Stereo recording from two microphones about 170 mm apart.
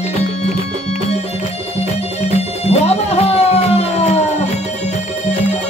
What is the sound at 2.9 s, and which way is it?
Music, 40° left (ahead or behind).